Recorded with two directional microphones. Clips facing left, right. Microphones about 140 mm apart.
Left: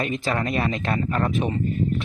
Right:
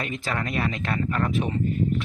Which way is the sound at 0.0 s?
25° left (ahead or behind).